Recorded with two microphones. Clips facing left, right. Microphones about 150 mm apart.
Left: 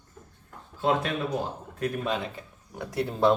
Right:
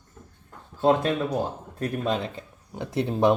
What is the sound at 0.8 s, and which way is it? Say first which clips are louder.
Speech: right 5 dB; 40° right (ahead or behind).